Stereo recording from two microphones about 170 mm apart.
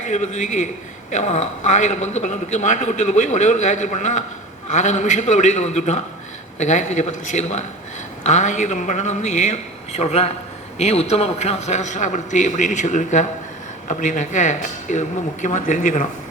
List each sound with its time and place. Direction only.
0.1 s a man's voice: 45° left (ahead or behind)